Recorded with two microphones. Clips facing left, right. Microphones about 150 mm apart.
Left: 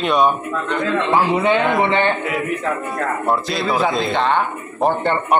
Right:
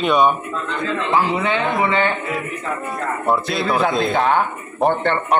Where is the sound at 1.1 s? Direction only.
25° left (ahead or behind).